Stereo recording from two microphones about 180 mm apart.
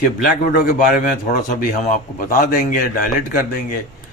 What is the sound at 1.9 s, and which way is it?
Speech, 50° left (ahead or behind).